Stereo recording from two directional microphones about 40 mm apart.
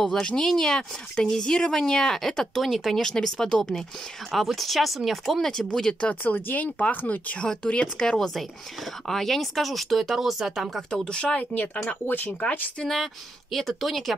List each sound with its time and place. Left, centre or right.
0.0 s a woman's voice: centre
3.0 s a woman's voice: centre
4.3 s speech: centre
6.2 s speech: left
7.3 s speech: left
9.0 s speech: centre
10.9 s speech: left
11.5 s speech: left
12.8 s speech: centre